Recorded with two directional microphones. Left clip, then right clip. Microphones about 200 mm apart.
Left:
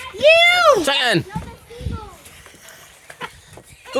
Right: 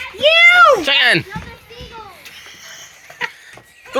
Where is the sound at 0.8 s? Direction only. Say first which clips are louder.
Right 5 dB; 35° left (ahead or behind).